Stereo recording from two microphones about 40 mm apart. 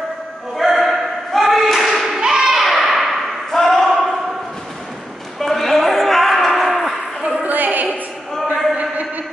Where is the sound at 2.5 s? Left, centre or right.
Centre.